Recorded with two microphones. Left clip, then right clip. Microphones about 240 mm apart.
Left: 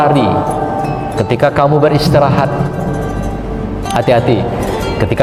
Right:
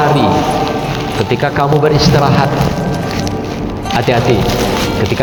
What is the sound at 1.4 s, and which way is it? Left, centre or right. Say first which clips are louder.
A man's voice: left 3 dB; left.